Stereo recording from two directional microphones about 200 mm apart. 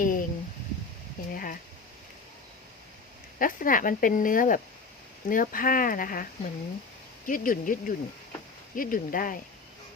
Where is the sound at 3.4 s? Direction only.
45° left (ahead or behind).